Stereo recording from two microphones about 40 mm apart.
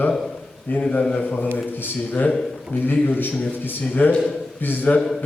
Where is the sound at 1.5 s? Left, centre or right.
Left.